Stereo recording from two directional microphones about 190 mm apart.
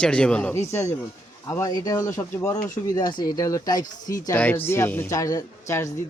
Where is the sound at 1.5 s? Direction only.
20° left (ahead or behind).